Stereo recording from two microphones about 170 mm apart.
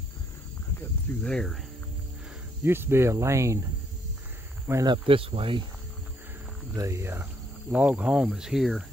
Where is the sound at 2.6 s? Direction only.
15° right (ahead or behind).